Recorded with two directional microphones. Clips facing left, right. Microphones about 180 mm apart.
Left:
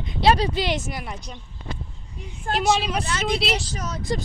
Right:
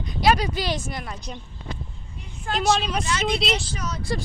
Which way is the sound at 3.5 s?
40° left (ahead or behind).